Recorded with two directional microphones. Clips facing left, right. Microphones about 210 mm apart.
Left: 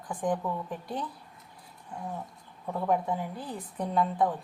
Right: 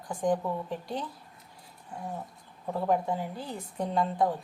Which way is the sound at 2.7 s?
30° right (ahead or behind).